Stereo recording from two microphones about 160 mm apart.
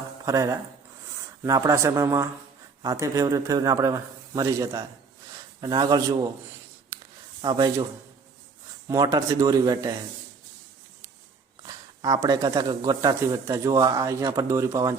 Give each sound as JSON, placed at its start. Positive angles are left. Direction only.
{"t": 0.3, "sound": "speech", "side_deg": -20}
{"t": 7.4, "sound": "speech", "side_deg": -25}
{"t": 8.9, "sound": "speech", "side_deg": -20}
{"t": 11.6, "sound": "speech", "side_deg": -25}